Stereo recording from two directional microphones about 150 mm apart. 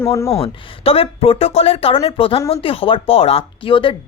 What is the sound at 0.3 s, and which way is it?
Speech, 40° left (ahead or behind).